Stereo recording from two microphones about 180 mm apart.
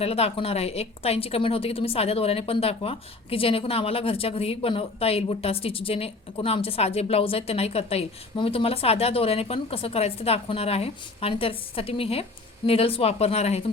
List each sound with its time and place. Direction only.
0.0 s a woman's voice: 35° left (ahead or behind)